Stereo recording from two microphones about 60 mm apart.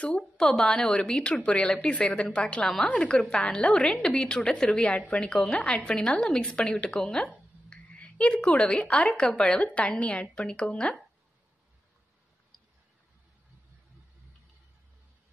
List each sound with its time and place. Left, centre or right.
0.4 s a woman's voice: centre
7.7 s a woman's voice: left